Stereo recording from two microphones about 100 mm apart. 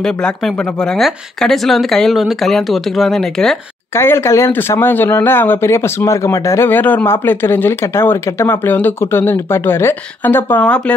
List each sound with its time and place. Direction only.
0.0 s speech: 5° left (ahead or behind)
3.9 s speech: 25° left (ahead or behind)
10.6 s speech: 10° left (ahead or behind)